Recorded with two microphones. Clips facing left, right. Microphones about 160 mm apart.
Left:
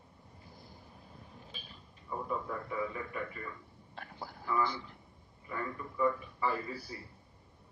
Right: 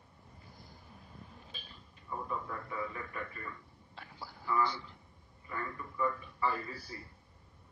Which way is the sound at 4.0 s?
50° left (ahead or behind).